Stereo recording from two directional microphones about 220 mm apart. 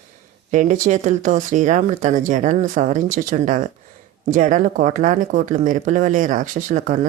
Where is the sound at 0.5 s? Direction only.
35° right (ahead or behind).